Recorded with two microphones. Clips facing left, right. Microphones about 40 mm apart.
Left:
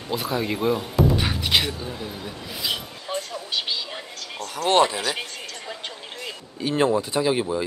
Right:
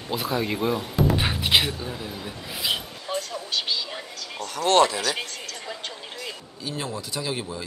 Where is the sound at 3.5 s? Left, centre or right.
Centre.